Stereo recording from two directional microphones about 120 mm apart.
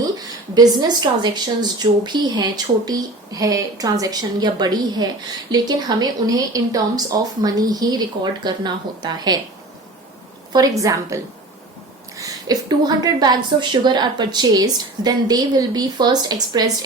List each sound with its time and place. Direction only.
0.0 s speech: 30° right (ahead or behind)
10.5 s a woman's voice: 30° right (ahead or behind)